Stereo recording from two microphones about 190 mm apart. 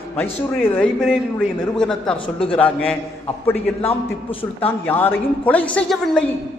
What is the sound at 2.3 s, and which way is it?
Speech, 30° left (ahead or behind).